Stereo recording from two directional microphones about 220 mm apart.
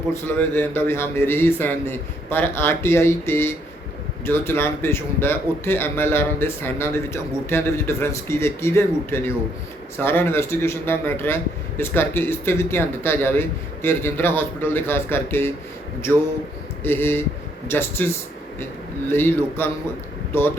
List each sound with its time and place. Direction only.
0.1 s a man's voice: 10° left (ahead or behind)
16.8 s a man's voice: 10° left (ahead or behind)